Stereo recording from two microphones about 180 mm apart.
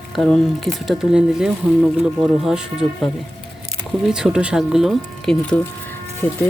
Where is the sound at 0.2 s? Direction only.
Centre (ahead or behind).